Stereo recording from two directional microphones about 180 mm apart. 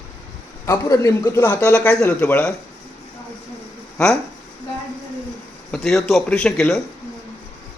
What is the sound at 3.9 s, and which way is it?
Speech, 5° left (ahead or behind).